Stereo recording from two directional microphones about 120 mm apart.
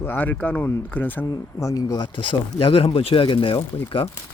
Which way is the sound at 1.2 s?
30° left (ahead or behind).